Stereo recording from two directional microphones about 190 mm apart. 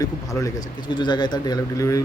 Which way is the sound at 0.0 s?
15° left (ahead or behind).